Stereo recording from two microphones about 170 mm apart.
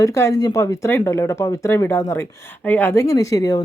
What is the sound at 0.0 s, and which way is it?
Speech, 15° left (ahead or behind).